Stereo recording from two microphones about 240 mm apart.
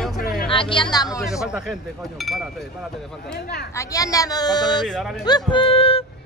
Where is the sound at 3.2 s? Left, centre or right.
Left.